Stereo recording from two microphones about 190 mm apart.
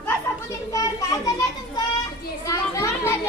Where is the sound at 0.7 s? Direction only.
20° left (ahead or behind).